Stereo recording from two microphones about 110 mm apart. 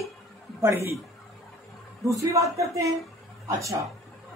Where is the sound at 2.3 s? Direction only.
30° right (ahead or behind).